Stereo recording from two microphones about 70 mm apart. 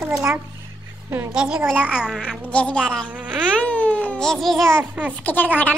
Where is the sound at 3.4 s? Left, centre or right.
Centre.